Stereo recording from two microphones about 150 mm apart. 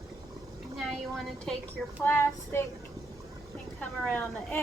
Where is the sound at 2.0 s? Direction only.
15° left (ahead or behind).